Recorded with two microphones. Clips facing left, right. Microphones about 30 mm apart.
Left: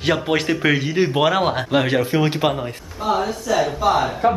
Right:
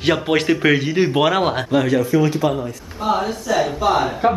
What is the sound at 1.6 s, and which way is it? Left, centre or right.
Speech, left.